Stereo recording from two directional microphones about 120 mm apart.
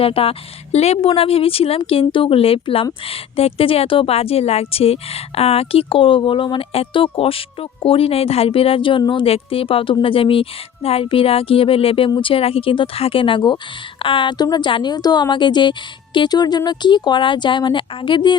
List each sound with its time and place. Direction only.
0.0 s a woman's voice: 50° left (ahead or behind)